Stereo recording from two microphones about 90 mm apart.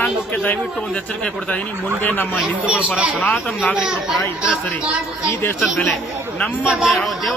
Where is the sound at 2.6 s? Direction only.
15° right (ahead or behind).